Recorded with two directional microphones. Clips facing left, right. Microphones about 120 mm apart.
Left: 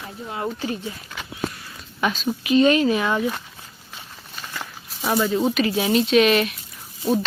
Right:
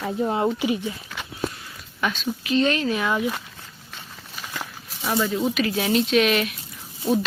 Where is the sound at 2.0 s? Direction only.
10° left (ahead or behind).